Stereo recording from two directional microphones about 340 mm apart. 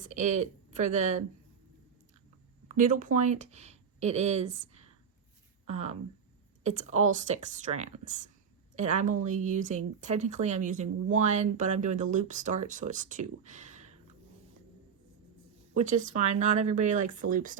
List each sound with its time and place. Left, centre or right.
0.0 s speech: right
2.6 s speech: right
5.6 s speech: centre
15.7 s a woman's voice: right